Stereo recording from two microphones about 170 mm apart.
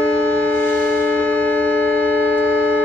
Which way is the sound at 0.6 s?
10° left (ahead or behind).